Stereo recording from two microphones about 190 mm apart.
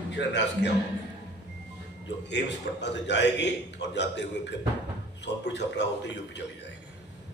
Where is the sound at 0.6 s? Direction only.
65° left (ahead or behind).